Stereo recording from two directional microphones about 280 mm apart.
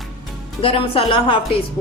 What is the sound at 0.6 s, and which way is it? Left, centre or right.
Speech, centre.